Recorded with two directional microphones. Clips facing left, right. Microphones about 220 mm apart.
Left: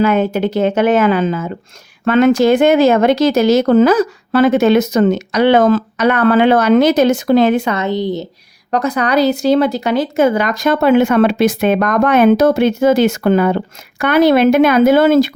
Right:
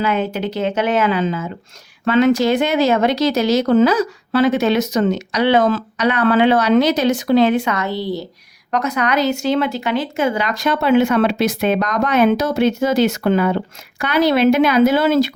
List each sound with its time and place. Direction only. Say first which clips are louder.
0.0 s speech: left 6 dB; 50° left (ahead or behind)
7.8 s speech: left 4 dB; 20° left (ahead or behind)
8.7 s speech: left 4 dB; 35° left (ahead or behind); by 15.4 s 50° left (ahead or behind)